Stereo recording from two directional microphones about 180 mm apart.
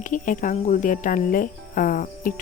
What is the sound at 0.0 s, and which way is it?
Speech, 45° left (ahead or behind).